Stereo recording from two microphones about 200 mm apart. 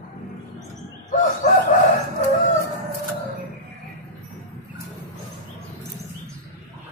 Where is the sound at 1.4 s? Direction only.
35° left (ahead or behind).